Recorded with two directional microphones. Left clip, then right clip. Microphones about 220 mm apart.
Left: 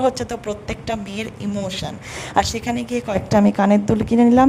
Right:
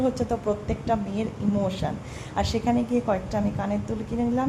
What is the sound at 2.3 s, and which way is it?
Speech, 50° left (ahead or behind).